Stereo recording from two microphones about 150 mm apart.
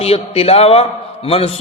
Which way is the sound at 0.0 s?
40° left (ahead or behind).